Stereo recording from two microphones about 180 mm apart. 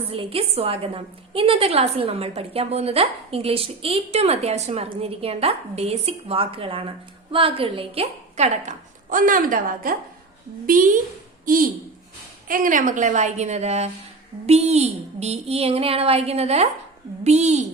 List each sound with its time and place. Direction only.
0.1 s a woman's voice: 30° right (ahead or behind)